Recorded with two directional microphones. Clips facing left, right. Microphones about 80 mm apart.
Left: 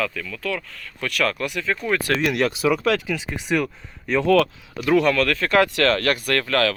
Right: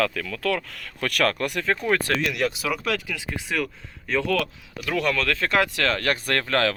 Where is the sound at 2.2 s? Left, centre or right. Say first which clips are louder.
Left 4 dB; left.